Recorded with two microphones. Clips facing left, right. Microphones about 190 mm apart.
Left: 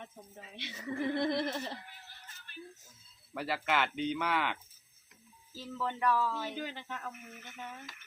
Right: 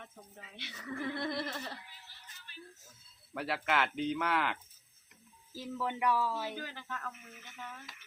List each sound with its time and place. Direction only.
0.5 s a sound: 20° left (ahead or behind)
1.8 s music: 50° left (ahead or behind)
3.3 s speech: centre (ahead or behind)
5.5 s speech: 10° right (ahead or behind)
6.6 s speech: 20° left (ahead or behind)
7.1 s speech: 50° left (ahead or behind)